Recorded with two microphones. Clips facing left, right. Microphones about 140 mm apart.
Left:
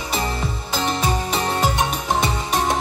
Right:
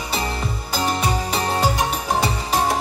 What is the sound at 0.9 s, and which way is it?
Music, 25° left (ahead or behind).